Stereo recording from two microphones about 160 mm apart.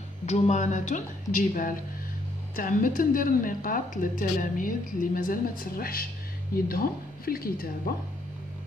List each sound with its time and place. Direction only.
0.3 s a woman's voice: 45° left (ahead or behind); by 7.9 s 65° left (ahead or behind)